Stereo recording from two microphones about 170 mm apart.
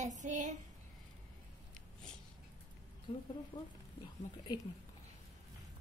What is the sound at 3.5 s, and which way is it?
Speech, 30° left (ahead or behind).